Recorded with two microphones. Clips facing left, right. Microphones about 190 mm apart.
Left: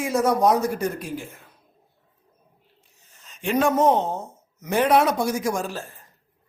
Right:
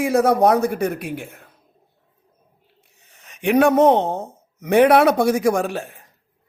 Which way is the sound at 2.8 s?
65° right (ahead or behind).